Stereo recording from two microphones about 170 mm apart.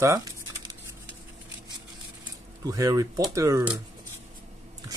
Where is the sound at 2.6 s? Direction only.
20° right (ahead or behind).